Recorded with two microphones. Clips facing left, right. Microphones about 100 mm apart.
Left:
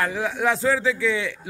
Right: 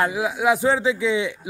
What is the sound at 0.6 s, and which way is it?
Speech, 20° right (ahead or behind).